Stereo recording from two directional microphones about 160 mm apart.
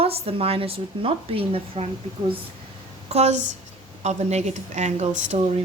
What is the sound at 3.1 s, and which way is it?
Speech, 45° right (ahead or behind).